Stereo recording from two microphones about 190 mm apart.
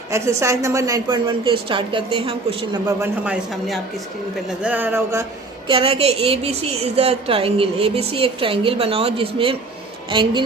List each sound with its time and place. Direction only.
0.1 s a woman's voice: 15° right (ahead or behind)
3.0 s a man's voice: 10° right (ahead or behind)
5.6 s a woman's voice: 30° right (ahead or behind)